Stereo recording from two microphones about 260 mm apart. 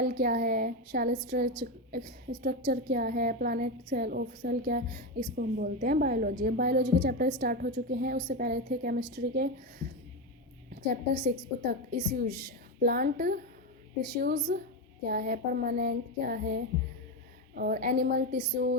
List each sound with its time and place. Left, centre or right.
0.0 s a woman's voice: right
11.1 s a woman's voice: right